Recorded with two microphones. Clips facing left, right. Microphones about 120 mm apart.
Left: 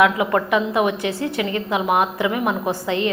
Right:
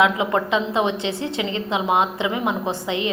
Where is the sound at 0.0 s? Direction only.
20° right (ahead or behind).